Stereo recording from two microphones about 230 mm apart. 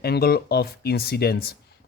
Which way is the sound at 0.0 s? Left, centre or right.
Left.